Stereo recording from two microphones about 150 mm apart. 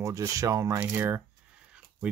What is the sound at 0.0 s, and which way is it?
Speech, 20° right (ahead or behind).